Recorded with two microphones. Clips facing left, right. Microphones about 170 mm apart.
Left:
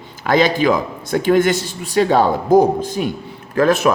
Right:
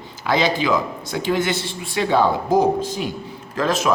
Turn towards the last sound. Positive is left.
turn(degrees=60)  # may be behind; listen again after turning